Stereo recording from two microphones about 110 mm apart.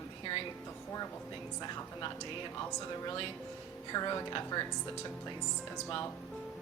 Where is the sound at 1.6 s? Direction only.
40° left (ahead or behind).